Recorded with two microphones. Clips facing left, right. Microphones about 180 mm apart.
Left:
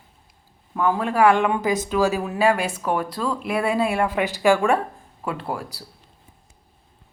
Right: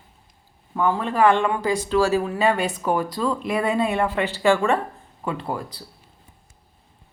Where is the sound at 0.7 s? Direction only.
5° left (ahead or behind).